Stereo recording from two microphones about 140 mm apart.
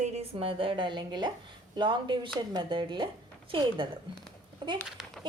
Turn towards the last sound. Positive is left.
turn(degrees=0)  # may be behind; listen again after turning